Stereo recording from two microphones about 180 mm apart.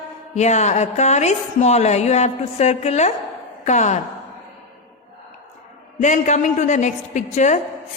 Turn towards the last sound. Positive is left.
turn(degrees=40)  # may be behind; listen again after turning